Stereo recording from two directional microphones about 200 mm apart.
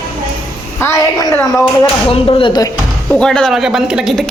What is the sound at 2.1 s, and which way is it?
Speech, 25° left (ahead or behind).